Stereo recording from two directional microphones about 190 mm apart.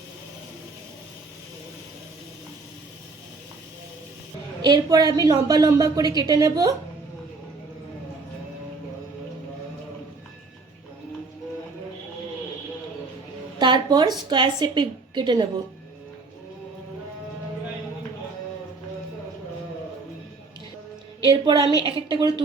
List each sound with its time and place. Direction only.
4.6 s a woman's voice: 20° right (ahead or behind)
13.6 s a sound: 25° right (ahead or behind)
14.3 s a woman's voice: 25° right (ahead or behind)
21.2 s a woman's voice: 25° right (ahead or behind)